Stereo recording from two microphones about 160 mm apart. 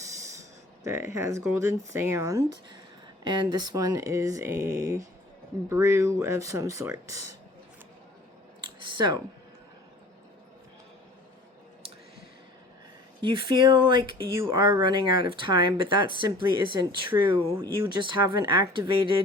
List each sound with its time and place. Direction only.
0.0 s a sound: 20° right (ahead or behind)
0.9 s speech: 20° right (ahead or behind)
13.5 s speech: 30° right (ahead or behind)